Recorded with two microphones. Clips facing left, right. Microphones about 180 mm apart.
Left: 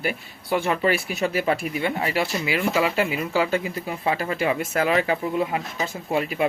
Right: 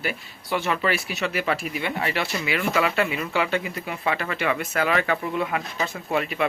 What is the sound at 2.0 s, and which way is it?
Speech, 15° left (ahead or behind).